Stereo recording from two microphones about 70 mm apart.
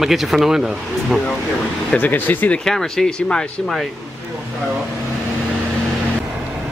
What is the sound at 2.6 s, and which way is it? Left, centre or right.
Speech, centre.